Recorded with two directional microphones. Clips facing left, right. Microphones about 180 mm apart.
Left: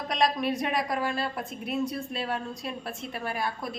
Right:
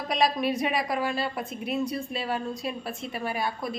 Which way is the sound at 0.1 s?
5° right (ahead or behind).